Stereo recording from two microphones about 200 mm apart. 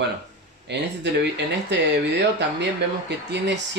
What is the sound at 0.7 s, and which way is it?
Speech, 60° right (ahead or behind).